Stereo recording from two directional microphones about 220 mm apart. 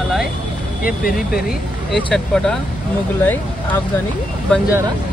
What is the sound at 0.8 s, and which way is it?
Speech, 40° left (ahead or behind).